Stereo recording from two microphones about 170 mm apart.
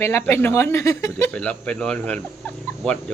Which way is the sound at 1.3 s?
5° left (ahead or behind).